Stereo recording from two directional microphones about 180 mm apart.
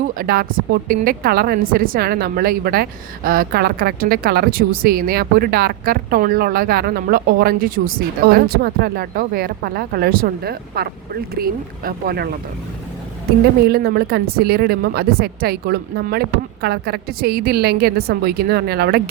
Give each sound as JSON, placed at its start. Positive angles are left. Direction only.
{"t": 0.1, "sound": "speech", "side_deg": -55}
{"t": 13.7, "sound": "speech", "side_deg": -65}